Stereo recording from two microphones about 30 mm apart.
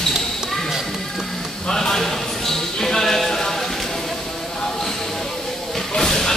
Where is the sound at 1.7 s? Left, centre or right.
Centre.